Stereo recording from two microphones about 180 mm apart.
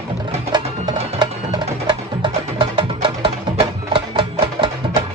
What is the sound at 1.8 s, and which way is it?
Music, 25° right (ahead or behind).